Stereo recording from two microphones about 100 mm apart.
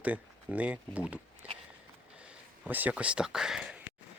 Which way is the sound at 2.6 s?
15° right (ahead or behind).